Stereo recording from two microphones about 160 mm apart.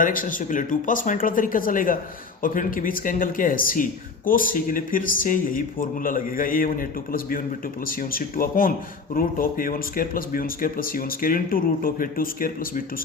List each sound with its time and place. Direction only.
0.0 s speech: 55° left (ahead or behind)